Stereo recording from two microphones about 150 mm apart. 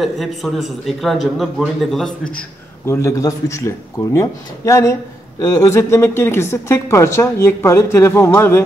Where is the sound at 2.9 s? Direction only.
20° left (ahead or behind).